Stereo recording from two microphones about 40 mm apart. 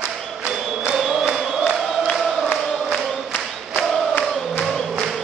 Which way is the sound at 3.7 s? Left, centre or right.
Left.